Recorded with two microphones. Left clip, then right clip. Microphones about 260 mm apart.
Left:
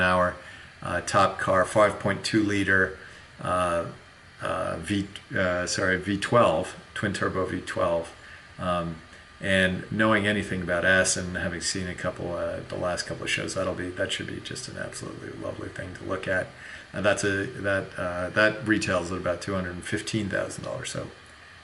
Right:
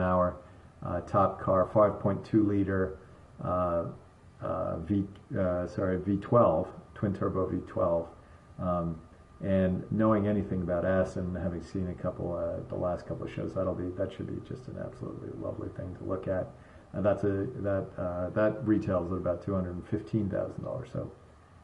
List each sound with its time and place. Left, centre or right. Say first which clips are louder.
0.0 s a sound: left 5 dB; centre
0.8 s speech: left 5 dB; centre
7.9 s speech: left 2 dB; right
9.4 s speech: left 6 dB; centre
12.1 s speech: left 3 dB; right; by 14.6 s centre
14.8 s speech: left 4 dB; right
16.1 s speech: left 5 dB; centre